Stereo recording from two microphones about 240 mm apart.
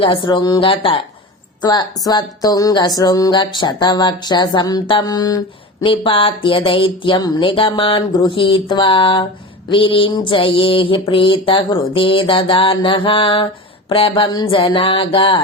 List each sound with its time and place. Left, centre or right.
0.0 s mantra: left
1.6 s speech: centre
5.8 s mantra: left